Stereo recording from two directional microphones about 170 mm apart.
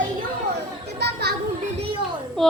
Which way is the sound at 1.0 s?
75° right (ahead or behind).